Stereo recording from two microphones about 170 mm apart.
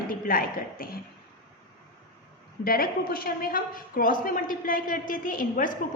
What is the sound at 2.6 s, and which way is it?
A woman's voice, 60° left (ahead or behind).